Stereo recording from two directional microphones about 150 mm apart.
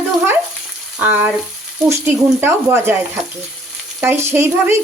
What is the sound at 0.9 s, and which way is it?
Speech, 10° right (ahead or behind).